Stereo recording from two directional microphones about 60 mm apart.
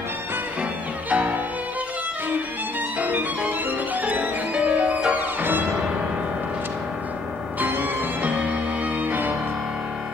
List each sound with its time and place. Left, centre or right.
1.1 s violin: right
3.0 s music: right
7.6 s music: right